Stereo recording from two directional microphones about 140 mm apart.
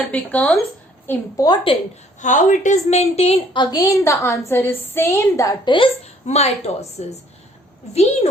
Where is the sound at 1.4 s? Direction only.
40° left (ahead or behind).